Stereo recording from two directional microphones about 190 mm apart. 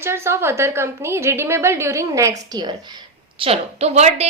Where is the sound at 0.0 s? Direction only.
15° right (ahead or behind).